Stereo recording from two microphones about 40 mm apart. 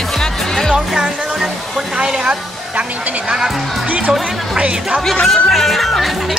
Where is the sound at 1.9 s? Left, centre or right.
Right.